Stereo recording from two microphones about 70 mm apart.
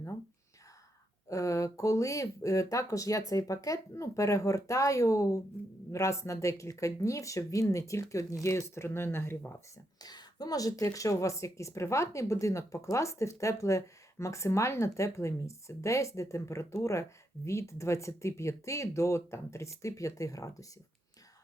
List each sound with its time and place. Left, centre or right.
1.3 s a woman's voice: left
10.0 s a woman's voice: left